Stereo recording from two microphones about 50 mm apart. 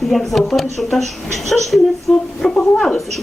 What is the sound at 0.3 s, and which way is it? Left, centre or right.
Speech, centre.